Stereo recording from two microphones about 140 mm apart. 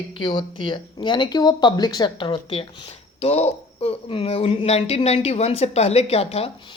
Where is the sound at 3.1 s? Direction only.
50° left (ahead or behind).